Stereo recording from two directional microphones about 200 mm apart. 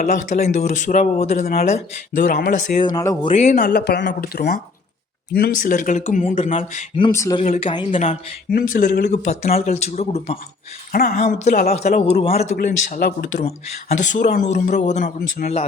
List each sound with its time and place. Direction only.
0.0 s speech: 40° left (ahead or behind)
2.9 s speech: 15° left (ahead or behind)
3.5 s speech: 45° left (ahead or behind); by 7.1 s 30° left (ahead or behind)
7.1 s speech: 15° left (ahead or behind)
7.4 s speech: 35° left (ahead or behind)
12.5 s speech: 45° left (ahead or behind)